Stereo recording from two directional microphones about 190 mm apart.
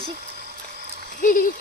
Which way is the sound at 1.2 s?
45° left (ahead or behind).